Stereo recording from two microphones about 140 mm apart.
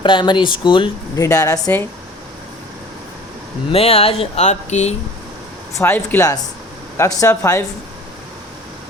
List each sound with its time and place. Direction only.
0.0 s speech: 35° left (ahead or behind)
1.1 s speech: 25° left (ahead or behind)
3.7 s speech: 45° left (ahead or behind)
5.8 s speech: 15° left (ahead or behind)